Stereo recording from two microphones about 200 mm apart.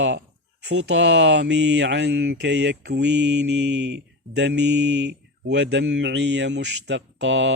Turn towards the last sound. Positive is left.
turn(degrees=-65)  # may be behind; listen again after turning